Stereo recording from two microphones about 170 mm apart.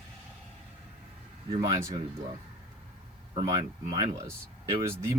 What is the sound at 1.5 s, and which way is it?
Speech, 25° right (ahead or behind).